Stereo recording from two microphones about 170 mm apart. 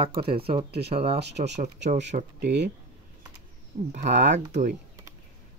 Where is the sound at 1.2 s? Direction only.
85° right.